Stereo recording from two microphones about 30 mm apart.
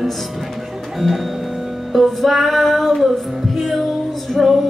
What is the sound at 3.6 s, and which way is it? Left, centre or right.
Music, centre.